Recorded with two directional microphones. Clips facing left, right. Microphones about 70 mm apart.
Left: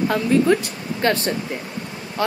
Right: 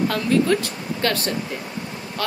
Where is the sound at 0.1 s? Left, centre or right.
Centre.